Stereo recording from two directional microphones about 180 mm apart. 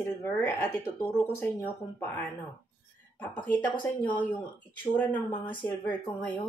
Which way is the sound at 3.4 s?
10° left (ahead or behind).